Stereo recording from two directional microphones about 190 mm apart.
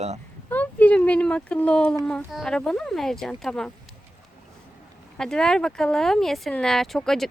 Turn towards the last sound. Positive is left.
turn(degrees=0)  # may be behind; listen again after turning